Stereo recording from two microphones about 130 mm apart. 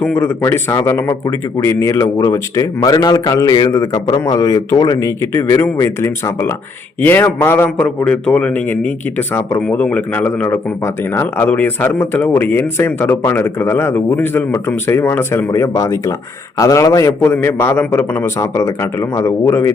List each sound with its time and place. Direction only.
0.0 s speech: 15° left (ahead or behind)